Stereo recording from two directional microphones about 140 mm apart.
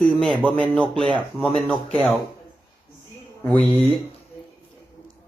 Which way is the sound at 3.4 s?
10° left (ahead or behind).